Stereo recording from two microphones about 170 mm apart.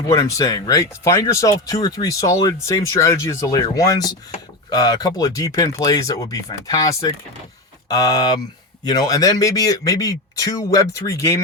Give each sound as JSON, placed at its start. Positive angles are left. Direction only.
{"t": 0.1, "sound": "speech", "side_deg": 20}